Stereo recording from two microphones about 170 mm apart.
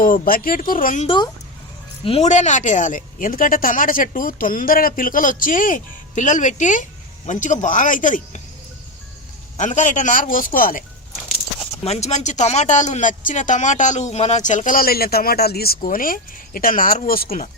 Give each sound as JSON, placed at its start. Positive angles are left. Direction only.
{"t": 0.0, "sound": "speech", "side_deg": 55}
{"t": 1.0, "sound": "speech", "side_deg": 30}
{"t": 2.0, "sound": "speech", "side_deg": 40}
{"t": 9.6, "sound": "speech", "side_deg": 45}
{"t": 11.8, "sound": "speech", "side_deg": 40}
{"t": 17.2, "sound": "speech", "side_deg": 45}